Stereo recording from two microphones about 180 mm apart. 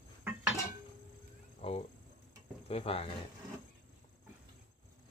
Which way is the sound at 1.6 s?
35° left (ahead or behind).